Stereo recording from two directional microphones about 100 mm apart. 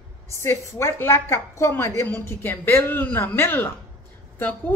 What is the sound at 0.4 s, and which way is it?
A woman's voice, 25° left (ahead or behind).